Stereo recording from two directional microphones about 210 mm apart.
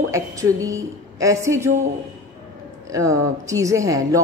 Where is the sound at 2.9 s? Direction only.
15° right (ahead or behind).